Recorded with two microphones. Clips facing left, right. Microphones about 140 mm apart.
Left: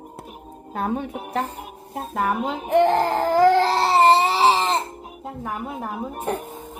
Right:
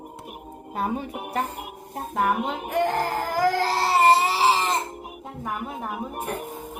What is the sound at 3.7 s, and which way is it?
Baby cry, 20° left (ahead or behind).